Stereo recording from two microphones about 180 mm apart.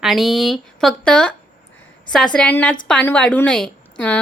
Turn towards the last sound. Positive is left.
turn(degrees=10)  # may be behind; listen again after turning